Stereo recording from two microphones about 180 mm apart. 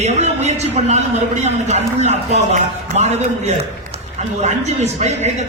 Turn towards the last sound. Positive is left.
turn(degrees=-40)  # may be behind; listen again after turning